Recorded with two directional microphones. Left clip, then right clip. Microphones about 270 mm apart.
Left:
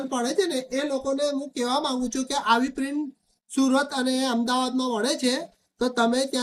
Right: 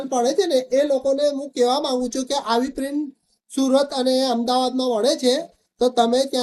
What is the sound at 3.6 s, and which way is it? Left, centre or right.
Speech, left.